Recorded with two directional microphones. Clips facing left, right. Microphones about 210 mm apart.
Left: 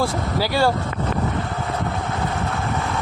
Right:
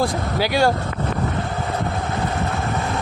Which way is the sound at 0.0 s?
20° right (ahead or behind).